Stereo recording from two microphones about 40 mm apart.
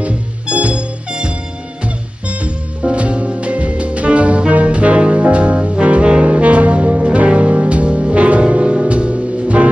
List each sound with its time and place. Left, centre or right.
0.0 s music: right